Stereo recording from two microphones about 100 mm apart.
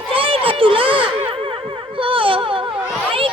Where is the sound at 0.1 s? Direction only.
65° right (ahead or behind).